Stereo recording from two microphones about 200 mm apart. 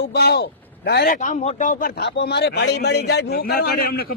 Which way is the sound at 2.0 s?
55° left (ahead or behind).